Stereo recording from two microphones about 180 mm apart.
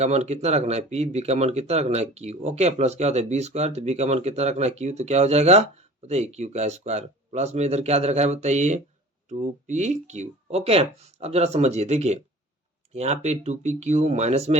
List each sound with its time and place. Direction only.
0.0 s speech: 35° right (ahead or behind)